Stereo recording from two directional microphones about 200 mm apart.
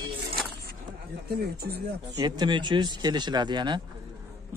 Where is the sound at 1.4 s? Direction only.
50° right (ahead or behind).